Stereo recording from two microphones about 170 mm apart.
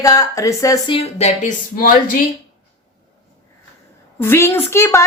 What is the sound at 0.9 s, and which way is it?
Speech, 40° left (ahead or behind).